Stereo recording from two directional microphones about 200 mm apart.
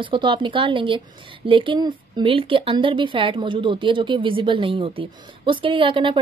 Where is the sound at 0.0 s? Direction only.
25° right (ahead or behind).